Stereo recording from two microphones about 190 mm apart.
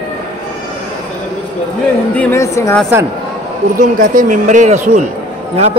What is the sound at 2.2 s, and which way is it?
Speech, 15° left (ahead or behind).